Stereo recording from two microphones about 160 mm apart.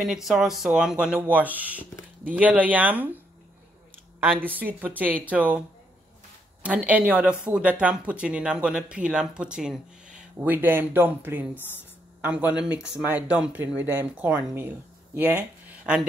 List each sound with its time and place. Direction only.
0.0 s speech: 5° right (ahead or behind)
4.2 s speech: 10° right (ahead or behind)
6.6 s speech: 10° right (ahead or behind)